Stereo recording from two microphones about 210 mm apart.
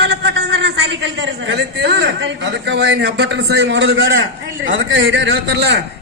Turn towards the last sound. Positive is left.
turn(degrees=-60)  # may be behind; listen again after turning